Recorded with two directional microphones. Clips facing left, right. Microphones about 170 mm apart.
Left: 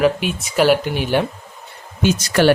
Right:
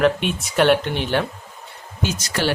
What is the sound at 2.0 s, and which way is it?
Speech, 60° left (ahead or behind).